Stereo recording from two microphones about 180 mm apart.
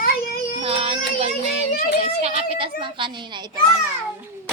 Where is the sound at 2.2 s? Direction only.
30° right (ahead or behind).